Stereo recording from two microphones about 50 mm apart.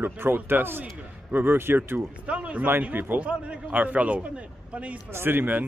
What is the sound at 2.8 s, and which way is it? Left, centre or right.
Speech, right.